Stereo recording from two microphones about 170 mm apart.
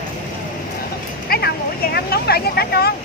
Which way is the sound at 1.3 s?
70° left (ahead or behind).